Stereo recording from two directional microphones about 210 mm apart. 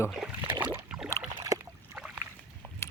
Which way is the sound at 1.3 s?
15° right (ahead or behind).